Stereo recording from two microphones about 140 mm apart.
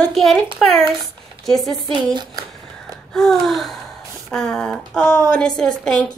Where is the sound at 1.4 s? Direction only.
Centre (ahead or behind).